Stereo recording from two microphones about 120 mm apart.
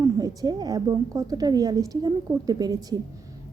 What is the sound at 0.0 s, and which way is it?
A woman's voice, 30° right (ahead or behind).